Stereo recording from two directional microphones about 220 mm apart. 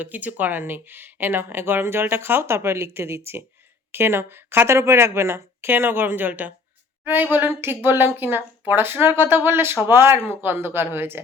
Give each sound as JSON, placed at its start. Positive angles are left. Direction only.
{"t": 0.0, "sound": "speech", "side_deg": -5}